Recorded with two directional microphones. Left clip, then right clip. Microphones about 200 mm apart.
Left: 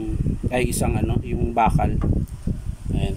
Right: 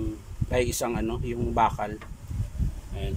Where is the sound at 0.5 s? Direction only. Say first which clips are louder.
Left 2 dB; centre (ahead or behind).